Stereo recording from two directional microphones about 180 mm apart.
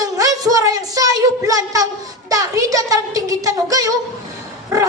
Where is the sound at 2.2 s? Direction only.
20° right (ahead or behind).